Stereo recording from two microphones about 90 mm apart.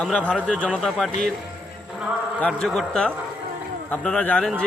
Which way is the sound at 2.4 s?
10° left (ahead or behind).